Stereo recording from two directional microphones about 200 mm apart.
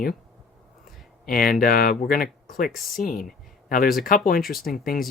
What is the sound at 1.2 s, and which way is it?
Speech, 45° left (ahead or behind).